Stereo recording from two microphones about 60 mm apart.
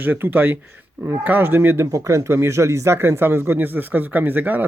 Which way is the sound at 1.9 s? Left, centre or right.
Right.